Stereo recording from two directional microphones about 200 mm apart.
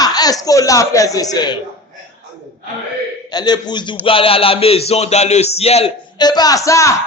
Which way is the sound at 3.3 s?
20° left (ahead or behind).